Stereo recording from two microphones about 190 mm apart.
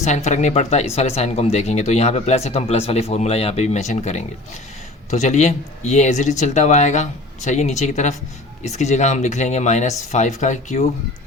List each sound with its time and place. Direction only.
0.0 s speech: 35° left (ahead or behind)